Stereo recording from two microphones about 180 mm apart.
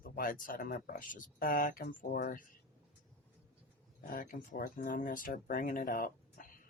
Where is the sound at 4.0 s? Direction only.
50° left (ahead or behind).